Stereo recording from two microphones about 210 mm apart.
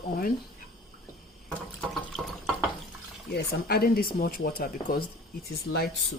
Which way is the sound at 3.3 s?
50° left (ahead or behind).